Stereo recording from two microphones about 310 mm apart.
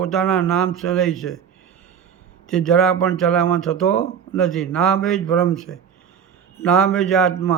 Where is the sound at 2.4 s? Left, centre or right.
Centre.